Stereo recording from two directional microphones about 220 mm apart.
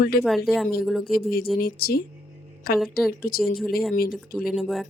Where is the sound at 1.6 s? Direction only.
45° left (ahead or behind).